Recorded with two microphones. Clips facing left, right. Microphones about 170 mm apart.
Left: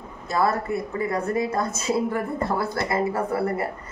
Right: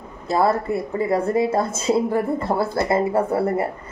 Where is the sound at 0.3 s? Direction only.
25° right (ahead or behind).